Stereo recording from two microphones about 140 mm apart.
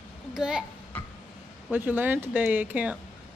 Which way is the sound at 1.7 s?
15° right (ahead or behind).